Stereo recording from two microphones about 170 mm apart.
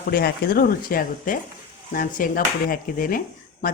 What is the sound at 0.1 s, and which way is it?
Speech, 60° left (ahead or behind).